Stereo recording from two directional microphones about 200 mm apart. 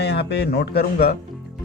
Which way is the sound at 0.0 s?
55° left (ahead or behind).